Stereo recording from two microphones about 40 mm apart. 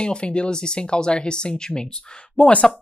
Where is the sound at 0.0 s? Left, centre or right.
Left.